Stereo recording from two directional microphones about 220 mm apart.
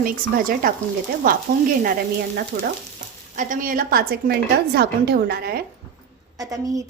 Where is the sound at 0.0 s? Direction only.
40° right (ahead or behind).